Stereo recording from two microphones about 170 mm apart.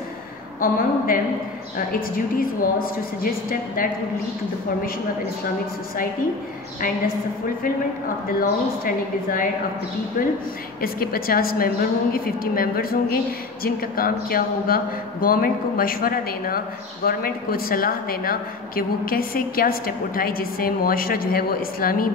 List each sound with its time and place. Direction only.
0.6 s speech: 55° left (ahead or behind)
8.4 s speech: 55° left (ahead or behind)